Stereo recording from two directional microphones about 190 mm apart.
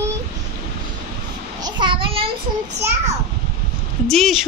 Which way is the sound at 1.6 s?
25° right (ahead or behind).